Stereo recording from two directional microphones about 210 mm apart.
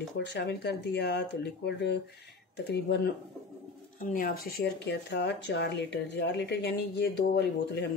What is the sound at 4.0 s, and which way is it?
Speech, 40° left (ahead or behind).